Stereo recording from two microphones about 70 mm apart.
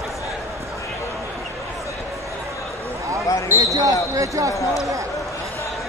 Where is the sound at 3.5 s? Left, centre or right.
Right.